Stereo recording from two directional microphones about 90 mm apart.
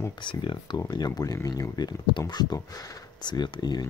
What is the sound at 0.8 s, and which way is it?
Speech, 50° left (ahead or behind).